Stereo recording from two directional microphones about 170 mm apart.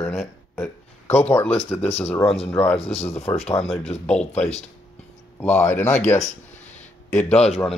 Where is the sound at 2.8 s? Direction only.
35° left (ahead or behind).